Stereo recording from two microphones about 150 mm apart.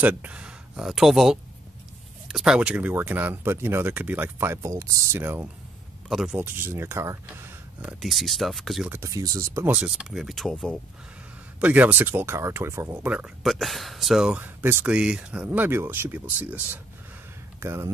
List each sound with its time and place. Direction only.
0.0 s speech: 10° right (ahead or behind)
6.0 s speech: 5° right (ahead or behind)
8.0 s speech: centre (ahead or behind)
8.9 s speech: 20° right (ahead or behind); by 10.8 s centre (ahead or behind)
11.6 s speech: 10° right (ahead or behind)
13.1 s speech: 5° right (ahead or behind)